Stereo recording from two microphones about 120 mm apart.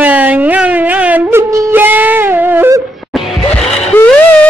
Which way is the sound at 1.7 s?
15° right (ahead or behind).